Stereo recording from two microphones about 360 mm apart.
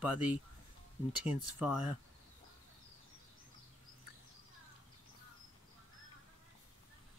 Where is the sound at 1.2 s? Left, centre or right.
Centre.